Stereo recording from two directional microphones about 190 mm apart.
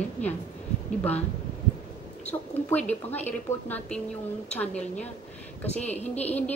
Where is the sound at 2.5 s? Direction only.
10° left (ahead or behind).